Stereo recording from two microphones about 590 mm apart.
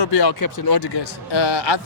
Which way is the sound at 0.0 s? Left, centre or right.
Left.